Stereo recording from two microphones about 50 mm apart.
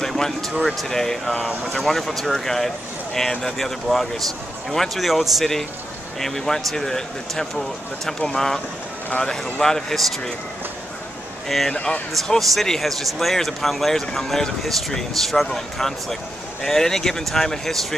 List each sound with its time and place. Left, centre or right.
0.0 s a sound: centre
0.8 s speech: centre
9.2 s speech: centre
11.4 s speech: centre
11.7 s speech: left
12.1 s speech: centre